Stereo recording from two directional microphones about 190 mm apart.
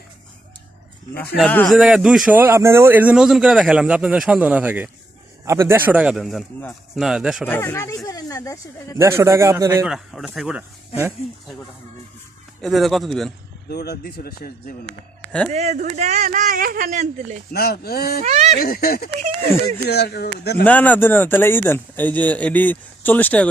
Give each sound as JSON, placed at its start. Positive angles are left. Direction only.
{"t": 1.4, "sound": "speech", "side_deg": 5}
{"t": 7.4, "sound": "speech", "side_deg": 10}
{"t": 9.0, "sound": "a man's voice", "side_deg": -15}
{"t": 9.8, "sound": "speech", "side_deg": 0}
{"t": 12.6, "sound": "speech", "side_deg": 0}
{"t": 13.7, "sound": "speech", "side_deg": 55}
{"t": 15.5, "sound": "a man's voice", "side_deg": -35}
{"t": 17.5, "sound": "speech", "side_deg": 55}
{"t": 18.2, "sound": "a man's voice", "side_deg": -35}
{"t": 18.6, "sound": "speech", "side_deg": 50}
{"t": 20.7, "sound": "speech", "side_deg": 10}